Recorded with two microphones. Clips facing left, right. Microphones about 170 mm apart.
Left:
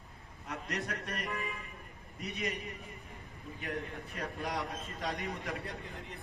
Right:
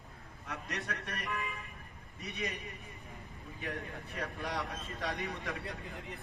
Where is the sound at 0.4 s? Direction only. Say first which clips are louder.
Left 2 dB; 35° left (ahead or behind).